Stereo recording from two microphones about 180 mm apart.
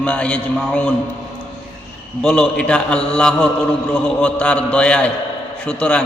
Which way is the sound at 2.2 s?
5° left (ahead or behind).